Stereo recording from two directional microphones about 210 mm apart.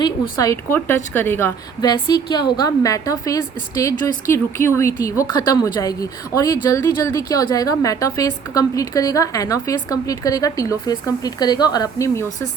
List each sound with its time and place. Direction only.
0.0 s a woman's voice: 15° left (ahead or behind)